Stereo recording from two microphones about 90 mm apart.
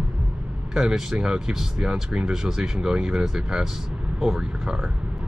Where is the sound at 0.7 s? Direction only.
5° right (ahead or behind).